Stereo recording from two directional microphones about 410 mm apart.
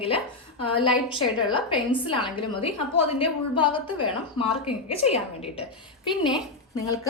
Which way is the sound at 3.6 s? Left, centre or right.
Centre.